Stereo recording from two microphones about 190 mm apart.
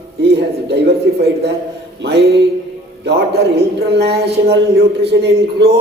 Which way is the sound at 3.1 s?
60° right (ahead or behind).